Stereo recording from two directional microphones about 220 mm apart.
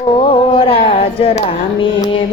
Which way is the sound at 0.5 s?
25° left (ahead or behind).